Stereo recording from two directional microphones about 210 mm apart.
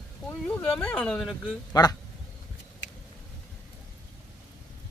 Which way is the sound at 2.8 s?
60° left (ahead or behind).